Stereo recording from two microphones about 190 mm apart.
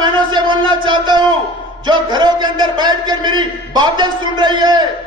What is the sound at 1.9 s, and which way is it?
A man's voice, 25° right (ahead or behind).